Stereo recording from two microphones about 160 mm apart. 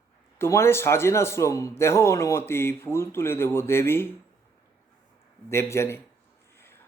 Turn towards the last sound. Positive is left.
turn(degrees=15)  # may be behind; listen again after turning